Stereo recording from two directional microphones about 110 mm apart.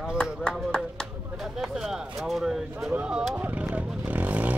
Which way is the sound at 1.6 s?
5° right (ahead or behind).